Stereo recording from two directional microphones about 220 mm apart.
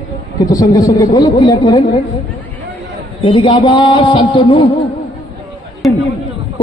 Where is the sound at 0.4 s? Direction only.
15° left (ahead or behind).